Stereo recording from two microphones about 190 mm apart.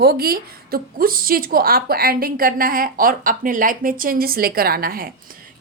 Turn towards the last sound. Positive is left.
turn(degrees=-50)  # may be behind; listen again after turning